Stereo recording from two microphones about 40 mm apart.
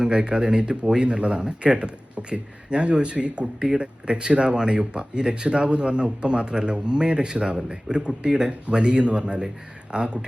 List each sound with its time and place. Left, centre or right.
0.0 s speech: right